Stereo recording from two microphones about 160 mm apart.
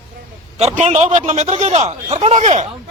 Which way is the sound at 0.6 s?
40° right (ahead or behind).